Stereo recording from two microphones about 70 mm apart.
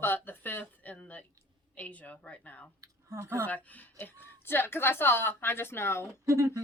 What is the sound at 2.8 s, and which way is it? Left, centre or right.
Speech, right.